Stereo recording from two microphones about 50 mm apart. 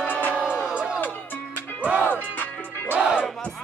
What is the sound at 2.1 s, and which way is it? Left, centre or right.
Music, left.